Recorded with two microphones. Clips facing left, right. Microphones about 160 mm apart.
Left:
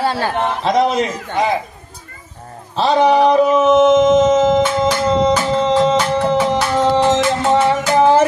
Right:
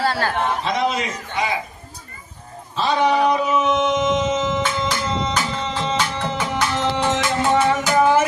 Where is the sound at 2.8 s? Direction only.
35° left (ahead or behind).